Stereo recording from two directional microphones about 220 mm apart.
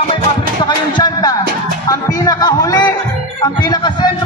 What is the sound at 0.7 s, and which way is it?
A man's voice, 20° left (ahead or behind).